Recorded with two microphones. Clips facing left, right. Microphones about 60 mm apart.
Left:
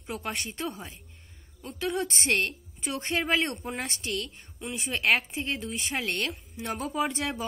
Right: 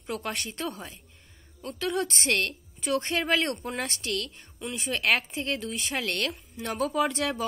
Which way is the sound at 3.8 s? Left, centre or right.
Left.